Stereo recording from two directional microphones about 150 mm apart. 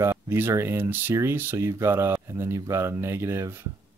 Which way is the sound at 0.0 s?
15° right (ahead or behind).